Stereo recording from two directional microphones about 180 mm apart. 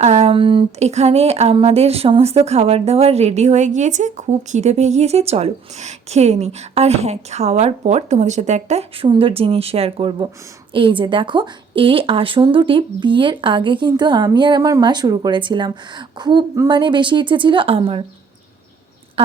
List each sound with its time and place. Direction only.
0.0 s speech: 35° right (ahead or behind)